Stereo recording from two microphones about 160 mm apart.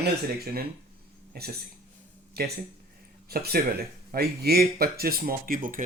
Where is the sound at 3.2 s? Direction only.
75° right (ahead or behind).